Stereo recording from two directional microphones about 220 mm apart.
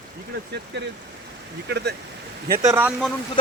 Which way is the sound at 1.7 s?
50° right (ahead or behind).